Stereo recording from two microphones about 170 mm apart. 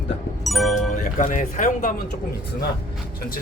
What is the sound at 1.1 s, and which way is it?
Speech, 50° left (ahead or behind).